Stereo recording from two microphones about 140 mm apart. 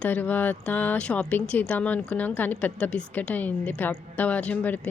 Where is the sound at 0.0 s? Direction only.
10° left (ahead or behind).